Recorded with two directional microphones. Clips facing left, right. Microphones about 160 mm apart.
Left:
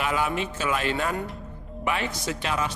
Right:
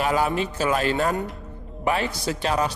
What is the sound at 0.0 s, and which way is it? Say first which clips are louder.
A man's voice: right 4 dB; 40° right (ahead or behind).